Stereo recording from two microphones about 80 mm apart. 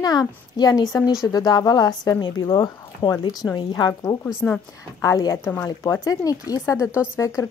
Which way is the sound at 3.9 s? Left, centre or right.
Left.